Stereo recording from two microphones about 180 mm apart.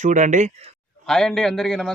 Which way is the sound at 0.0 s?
40° right (ahead or behind).